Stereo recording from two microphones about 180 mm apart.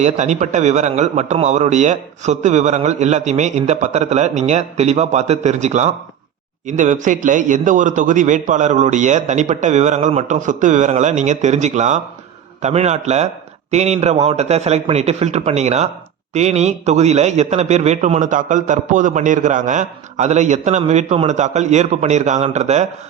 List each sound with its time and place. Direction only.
0.0 s a man's voice: 40° right (ahead or behind)